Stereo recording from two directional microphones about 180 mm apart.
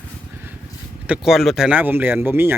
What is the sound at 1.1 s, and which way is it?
Speech, centre (ahead or behind).